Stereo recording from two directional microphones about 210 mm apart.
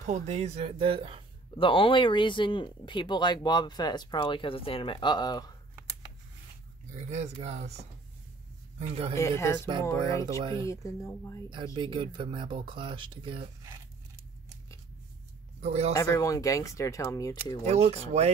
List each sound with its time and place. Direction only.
0.0 s speech: 35° right (ahead or behind)
1.6 s speech: 25° left (ahead or behind)
7.1 s a man's voice: 30° right (ahead or behind)
9.1 s speech: 15° left (ahead or behind)
10.2 s speech: 20° right (ahead or behind)
10.7 s speech: 15° left (ahead or behind)
11.5 s speech: 20° right (ahead or behind)
15.6 s speech: 30° right (ahead or behind)
15.9 s speech: 15° left (ahead or behind)
17.6 s speech: 30° right (ahead or behind)